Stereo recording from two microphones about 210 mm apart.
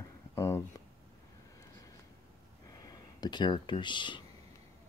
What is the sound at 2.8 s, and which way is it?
Speech, 20° left (ahead or behind).